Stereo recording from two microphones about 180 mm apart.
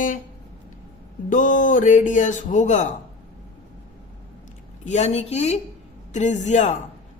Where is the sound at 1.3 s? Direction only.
45° left (ahead or behind).